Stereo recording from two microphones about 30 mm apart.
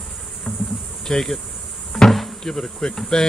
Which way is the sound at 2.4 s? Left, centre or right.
Left.